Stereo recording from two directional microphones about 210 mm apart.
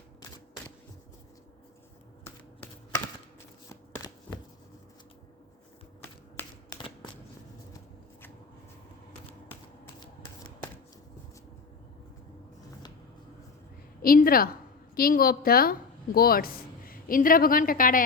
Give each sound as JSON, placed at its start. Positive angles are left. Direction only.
{"t": 3.9, "sound": "shuffling cards", "side_deg": 15}
{"t": 6.3, "sound": "typewriter", "side_deg": 15}
{"t": 14.0, "sound": "a woman's voice", "side_deg": 45}